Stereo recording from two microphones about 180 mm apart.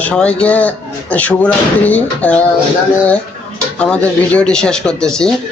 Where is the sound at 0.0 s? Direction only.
5° left (ahead or behind).